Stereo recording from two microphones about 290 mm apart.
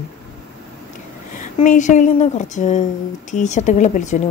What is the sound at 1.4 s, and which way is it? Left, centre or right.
Speech, left.